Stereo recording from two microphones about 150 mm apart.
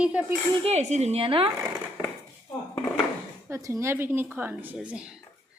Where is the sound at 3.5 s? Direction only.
20° right (ahead or behind).